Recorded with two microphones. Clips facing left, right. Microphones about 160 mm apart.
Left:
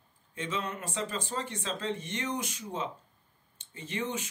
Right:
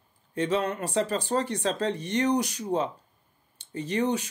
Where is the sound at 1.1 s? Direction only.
40° right (ahead or behind).